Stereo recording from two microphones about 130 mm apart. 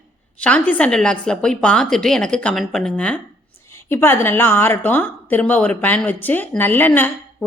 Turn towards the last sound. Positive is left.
turn(degrees=15)  # may be behind; listen again after turning